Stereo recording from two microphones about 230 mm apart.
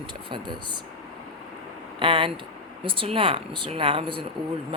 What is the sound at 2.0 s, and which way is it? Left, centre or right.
Speech, right.